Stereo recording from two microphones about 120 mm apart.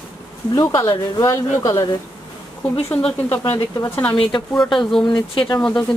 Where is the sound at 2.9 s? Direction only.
15° left (ahead or behind).